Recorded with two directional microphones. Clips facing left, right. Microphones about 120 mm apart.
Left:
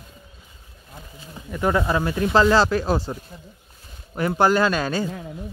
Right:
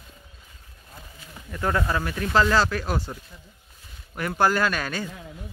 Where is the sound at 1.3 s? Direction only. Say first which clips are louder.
Left 4 dB; 15° left (ahead or behind).